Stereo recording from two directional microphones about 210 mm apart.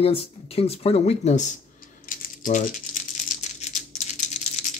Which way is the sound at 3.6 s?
35° left (ahead or behind).